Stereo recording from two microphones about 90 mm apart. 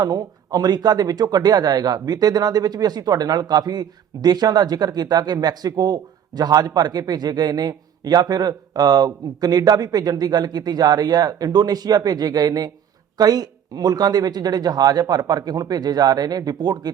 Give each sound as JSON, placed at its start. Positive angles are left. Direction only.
{"t": 0.0, "sound": "speech", "side_deg": -45}